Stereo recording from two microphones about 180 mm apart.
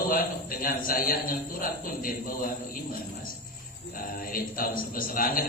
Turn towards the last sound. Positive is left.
turn(degrees=50)  # may be behind; listen again after turning